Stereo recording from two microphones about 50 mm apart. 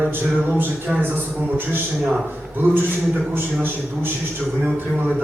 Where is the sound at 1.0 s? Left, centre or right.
Right.